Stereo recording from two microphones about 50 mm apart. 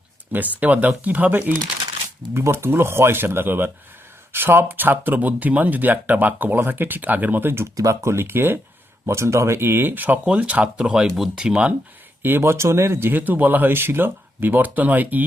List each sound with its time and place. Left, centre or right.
0.3 s speech: right
2.3 s speech: right
7.6 s speech: right
9.0 s speech: right
10.2 s speech: right
11.0 s speech: centre
11.3 s speech: right
12.4 s speech: right